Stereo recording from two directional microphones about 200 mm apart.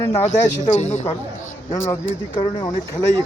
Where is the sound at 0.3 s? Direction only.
35° left (ahead or behind).